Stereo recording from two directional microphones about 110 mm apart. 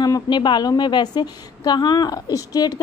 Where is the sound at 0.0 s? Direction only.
40° left (ahead or behind).